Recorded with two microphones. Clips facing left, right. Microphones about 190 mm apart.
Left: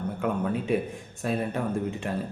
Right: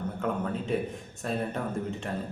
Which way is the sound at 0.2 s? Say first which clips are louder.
Left 3 dB; 10° left (ahead or behind).